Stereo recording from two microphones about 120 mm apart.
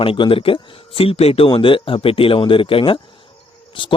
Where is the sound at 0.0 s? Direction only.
50° left (ahead or behind).